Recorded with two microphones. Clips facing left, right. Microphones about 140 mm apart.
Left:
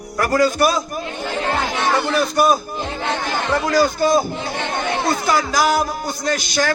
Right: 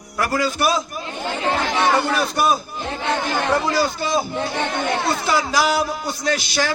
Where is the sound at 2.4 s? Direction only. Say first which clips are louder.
Left 4 dB; 45° left (ahead or behind).